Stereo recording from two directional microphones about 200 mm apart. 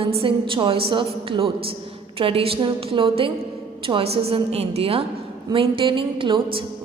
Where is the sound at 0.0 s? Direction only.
30° right (ahead or behind).